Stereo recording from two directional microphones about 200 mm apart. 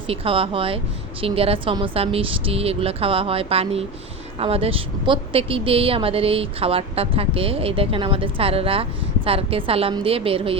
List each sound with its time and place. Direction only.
0.1 s a woman's voice: 25° right (ahead or behind)